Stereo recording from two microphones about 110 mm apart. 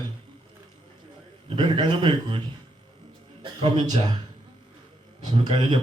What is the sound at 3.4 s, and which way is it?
Speech, 45° right (ahead or behind).